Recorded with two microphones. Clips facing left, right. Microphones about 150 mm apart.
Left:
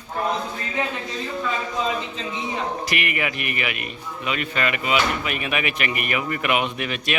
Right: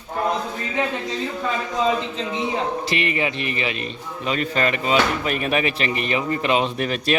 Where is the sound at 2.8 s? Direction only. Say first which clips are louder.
Right 3 dB; 25° right (ahead or behind).